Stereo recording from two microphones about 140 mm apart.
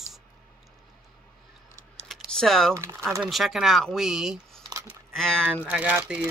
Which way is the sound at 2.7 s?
20° right (ahead or behind).